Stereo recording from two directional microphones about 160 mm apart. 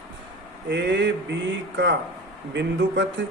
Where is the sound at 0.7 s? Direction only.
90° right.